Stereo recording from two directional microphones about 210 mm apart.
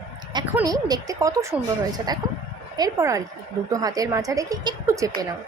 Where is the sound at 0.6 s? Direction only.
20° right (ahead or behind).